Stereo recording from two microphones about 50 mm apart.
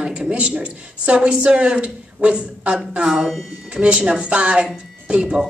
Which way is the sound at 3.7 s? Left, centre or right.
Right.